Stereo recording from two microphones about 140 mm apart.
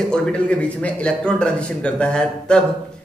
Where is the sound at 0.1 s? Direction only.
5° left (ahead or behind).